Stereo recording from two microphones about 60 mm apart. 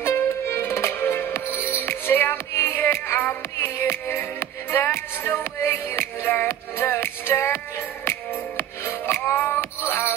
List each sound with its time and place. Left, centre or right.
0.0 s music: left